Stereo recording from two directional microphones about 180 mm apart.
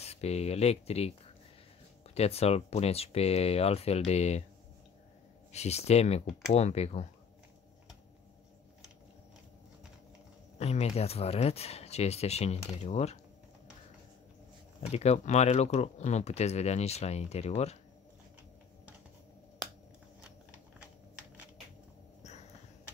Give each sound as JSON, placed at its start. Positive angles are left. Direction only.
{"t": 0.0, "sound": "speech", "side_deg": 35}
{"t": 2.1, "sound": "speech", "side_deg": 35}
{"t": 5.5, "sound": "speech", "side_deg": 35}
{"t": 10.6, "sound": "speech", "side_deg": 35}
{"t": 14.9, "sound": "speech", "side_deg": 35}
{"t": 22.2, "sound": "a sound", "side_deg": 40}